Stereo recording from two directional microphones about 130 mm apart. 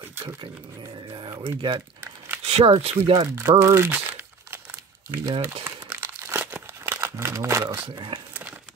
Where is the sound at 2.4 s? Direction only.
50° right (ahead or behind).